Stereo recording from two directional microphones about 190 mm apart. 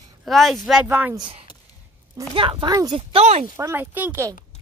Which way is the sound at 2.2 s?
25° right (ahead or behind).